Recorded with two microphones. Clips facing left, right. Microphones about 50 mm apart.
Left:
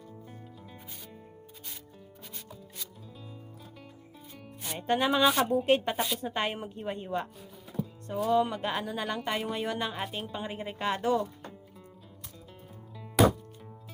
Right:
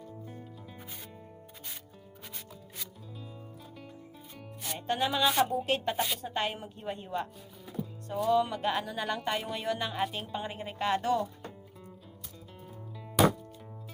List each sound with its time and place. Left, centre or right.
4.6 s music: centre
4.9 s speech: centre
5.3 s speech: centre
5.6 s speech: centre
8.3 s speech: centre